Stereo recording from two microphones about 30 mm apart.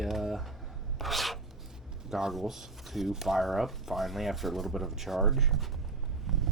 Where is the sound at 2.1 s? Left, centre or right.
Centre.